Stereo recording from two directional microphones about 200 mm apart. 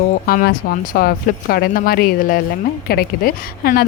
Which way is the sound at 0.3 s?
45° left (ahead or behind).